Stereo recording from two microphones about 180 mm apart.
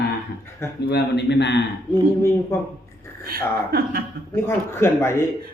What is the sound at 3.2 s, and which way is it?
Speech, 55° right (ahead or behind).